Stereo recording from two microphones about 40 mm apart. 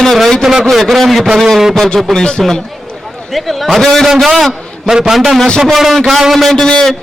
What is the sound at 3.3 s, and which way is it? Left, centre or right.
A man's voice, centre.